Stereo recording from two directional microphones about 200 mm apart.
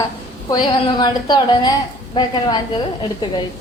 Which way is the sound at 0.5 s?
20° left (ahead or behind).